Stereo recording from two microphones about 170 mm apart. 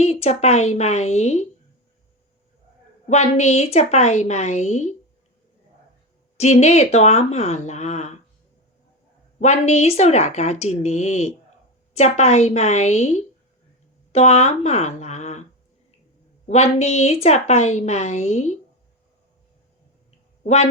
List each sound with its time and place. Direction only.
0.0 s a woman's voice: 40° left (ahead or behind)
3.1 s a woman's voice: 40° left (ahead or behind)
6.3 s a woman's voice: 40° left (ahead or behind)
9.4 s a woman's voice: 40° left (ahead or behind)
16.5 s a woman's voice: 40° left (ahead or behind)